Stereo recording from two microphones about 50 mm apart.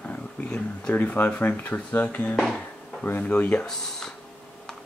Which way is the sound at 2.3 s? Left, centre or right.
Centre.